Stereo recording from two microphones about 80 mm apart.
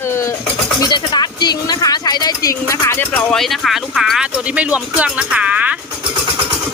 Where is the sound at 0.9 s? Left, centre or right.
Left.